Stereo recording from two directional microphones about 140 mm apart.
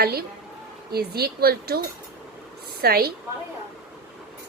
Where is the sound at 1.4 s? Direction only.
90° right.